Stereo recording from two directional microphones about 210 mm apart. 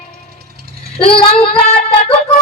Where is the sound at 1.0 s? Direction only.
25° left (ahead or behind).